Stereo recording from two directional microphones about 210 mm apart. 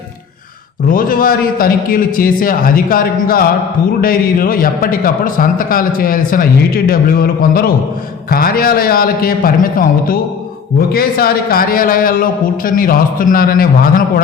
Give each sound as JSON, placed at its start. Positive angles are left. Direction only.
{"t": 0.9, "sound": "a man's voice", "side_deg": 40}